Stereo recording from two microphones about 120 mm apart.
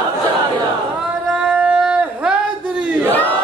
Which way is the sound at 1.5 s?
10° right (ahead or behind).